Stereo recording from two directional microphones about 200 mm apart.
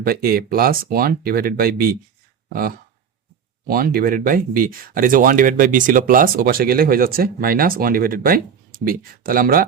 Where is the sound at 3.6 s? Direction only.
50° right (ahead or behind).